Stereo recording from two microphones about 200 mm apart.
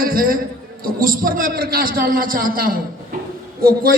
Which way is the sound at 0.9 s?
45° right (ahead or behind).